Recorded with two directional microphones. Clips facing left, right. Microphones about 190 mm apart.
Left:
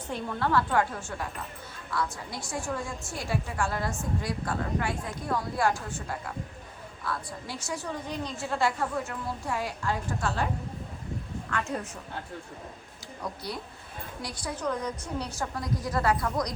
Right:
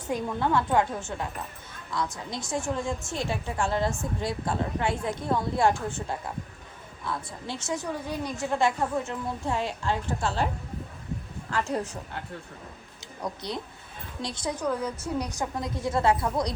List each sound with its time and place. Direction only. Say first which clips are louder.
0.1 s a woman's voice: right 2 dB; 20° right (ahead or behind)
7.0 s a woman's voice: right 1 dB; 20° right (ahead or behind)
7.9 s a woman's voice: right 2 dB; 10° right (ahead or behind); by 10.4 s 30° right (ahead or behind)
11.5 s speech: right 3 dB; 35° right (ahead or behind)
14.2 s a woman's voice: right 6 dB; 25° right (ahead or behind)
14.6 s a woman's voice: right 1 dB; 10° right (ahead or behind); by 16.6 s 30° right (ahead or behind)